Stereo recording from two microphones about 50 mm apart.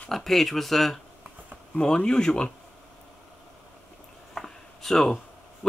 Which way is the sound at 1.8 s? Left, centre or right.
Centre.